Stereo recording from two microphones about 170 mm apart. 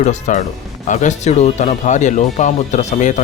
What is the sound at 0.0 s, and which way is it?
Speech, 45° left (ahead or behind).